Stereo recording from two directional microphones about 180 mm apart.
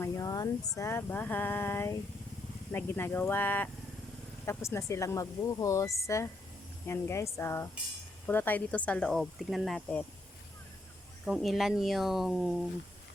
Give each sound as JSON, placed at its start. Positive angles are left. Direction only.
{"t": 0.0, "sound": "a sound", "side_deg": 20}
{"t": 0.8, "sound": "speech", "side_deg": 15}
{"t": 11.3, "sound": "speech", "side_deg": 0}